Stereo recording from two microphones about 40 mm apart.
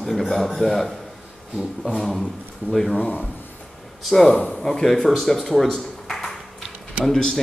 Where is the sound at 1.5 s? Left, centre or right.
Centre.